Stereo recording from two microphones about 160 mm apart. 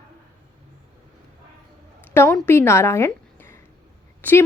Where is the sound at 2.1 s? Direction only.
15° left (ahead or behind).